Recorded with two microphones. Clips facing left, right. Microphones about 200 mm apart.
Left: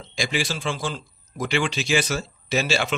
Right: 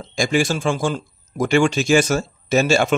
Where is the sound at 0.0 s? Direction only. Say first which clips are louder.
Right 8 dB; 45° right (ahead or behind).